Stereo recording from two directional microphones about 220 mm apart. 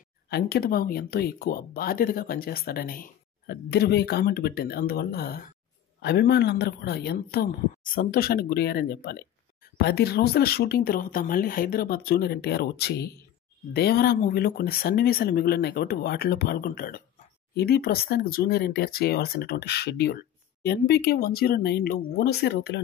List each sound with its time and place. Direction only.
0.3 s speech: 45° left (ahead or behind)